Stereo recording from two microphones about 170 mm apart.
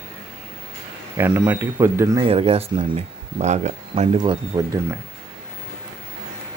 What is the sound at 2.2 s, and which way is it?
Speech, 35° right (ahead or behind).